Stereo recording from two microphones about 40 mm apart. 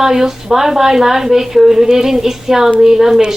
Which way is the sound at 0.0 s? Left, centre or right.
Centre.